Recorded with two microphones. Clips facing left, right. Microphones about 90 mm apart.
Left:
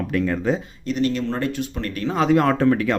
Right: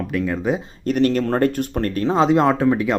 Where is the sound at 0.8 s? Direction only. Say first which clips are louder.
Right 5 dB; 55° right (ahead or behind).